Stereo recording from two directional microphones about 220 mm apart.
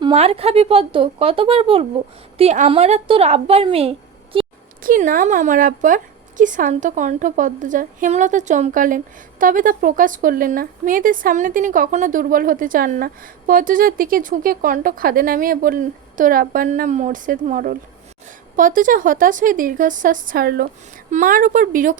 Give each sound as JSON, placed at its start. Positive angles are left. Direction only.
{"t": 0.0, "sound": "a woman's voice", "side_deg": -25}
{"t": 4.8, "sound": "speech", "side_deg": -40}